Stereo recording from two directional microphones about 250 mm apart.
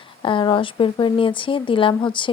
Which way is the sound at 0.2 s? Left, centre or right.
Centre.